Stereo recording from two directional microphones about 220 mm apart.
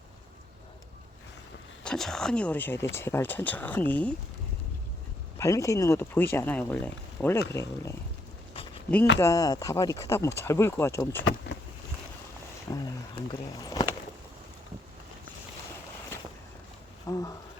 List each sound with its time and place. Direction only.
1.8 s speech: centre (ahead or behind)
5.4 s speech: 15° left (ahead or behind)
9.1 s speech: 15° left (ahead or behind)
12.7 s a sound: 15° left (ahead or behind)
17.1 s insect: 15° left (ahead or behind)